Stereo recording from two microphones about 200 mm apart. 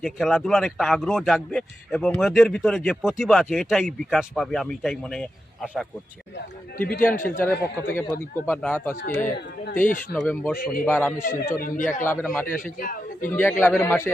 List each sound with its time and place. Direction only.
0.0 s a man's voice: centre (ahead or behind)
7.3 s a man's voice: 10° left (ahead or behind)
9.0 s speech: 45° left (ahead or behind)
10.1 s a man's voice: 5° left (ahead or behind)
10.6 s speech: 45° left (ahead or behind)
10.8 s a man's voice: 10° left (ahead or behind)
11.2 s a man's voice: 45° left (ahead or behind)
12.0 s a man's voice: 10° left (ahead or behind)
12.8 s a man's voice: 45° left (ahead or behind)
13.3 s a man's voice: 10° left (ahead or behind)